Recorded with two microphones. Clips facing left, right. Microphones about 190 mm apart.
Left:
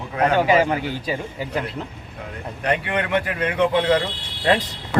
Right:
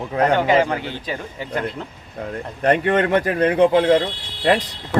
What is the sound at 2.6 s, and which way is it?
Speech, 45° right (ahead or behind).